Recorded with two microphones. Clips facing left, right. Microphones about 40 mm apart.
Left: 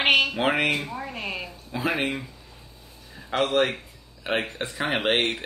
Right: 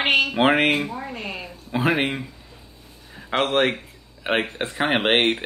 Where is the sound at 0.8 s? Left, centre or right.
Centre.